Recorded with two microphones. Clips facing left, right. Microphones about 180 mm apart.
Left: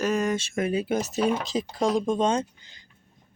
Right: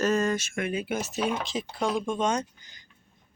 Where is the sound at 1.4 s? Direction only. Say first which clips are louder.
Left 4 dB; 40° left (ahead or behind).